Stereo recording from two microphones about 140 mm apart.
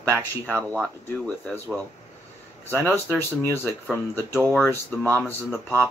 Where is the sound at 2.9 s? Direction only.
15° left (ahead or behind).